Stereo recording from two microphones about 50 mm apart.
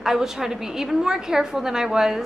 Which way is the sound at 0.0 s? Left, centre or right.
Centre.